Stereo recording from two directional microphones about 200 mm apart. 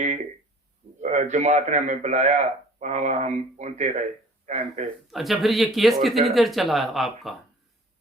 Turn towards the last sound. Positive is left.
turn(degrees=0)  # may be behind; listen again after turning